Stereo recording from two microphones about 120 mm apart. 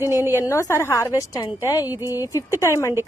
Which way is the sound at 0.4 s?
25° left (ahead or behind).